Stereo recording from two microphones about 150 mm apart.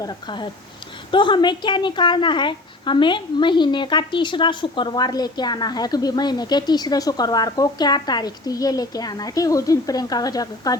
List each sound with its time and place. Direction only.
0.0 s a woman's voice: 30° left (ahead or behind)